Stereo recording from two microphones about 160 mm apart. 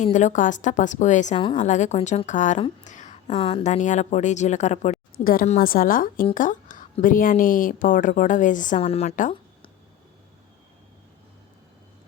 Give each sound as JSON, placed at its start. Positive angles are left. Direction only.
{"t": 0.0, "sound": "a woman's voice", "side_deg": 50}
{"t": 5.1, "sound": "a woman's voice", "side_deg": 65}
{"t": 8.8, "sound": "a woman's voice", "side_deg": 40}